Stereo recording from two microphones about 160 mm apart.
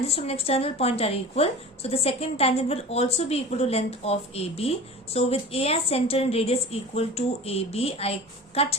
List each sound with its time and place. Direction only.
0.1 s a woman's voice: 40° left (ahead or behind)